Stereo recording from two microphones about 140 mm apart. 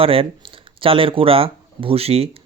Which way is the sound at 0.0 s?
40° right (ahead or behind).